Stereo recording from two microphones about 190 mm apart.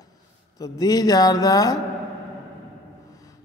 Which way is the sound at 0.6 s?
20° left (ahead or behind).